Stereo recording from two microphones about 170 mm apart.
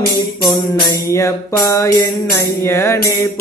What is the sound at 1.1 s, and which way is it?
Music, 15° left (ahead or behind).